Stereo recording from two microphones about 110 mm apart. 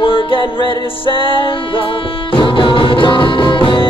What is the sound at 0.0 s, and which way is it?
Music, 50° left (ahead or behind).